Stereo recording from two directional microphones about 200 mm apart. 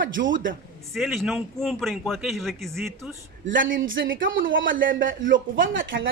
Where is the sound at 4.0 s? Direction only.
60° right (ahead or behind).